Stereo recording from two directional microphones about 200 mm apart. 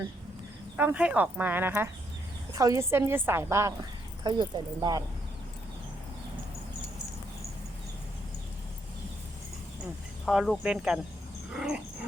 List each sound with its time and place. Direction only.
0.8 s a woman's voice: 10° right (ahead or behind)
10.2 s speech: centre (ahead or behind)
11.5 s dog: 5° right (ahead or behind)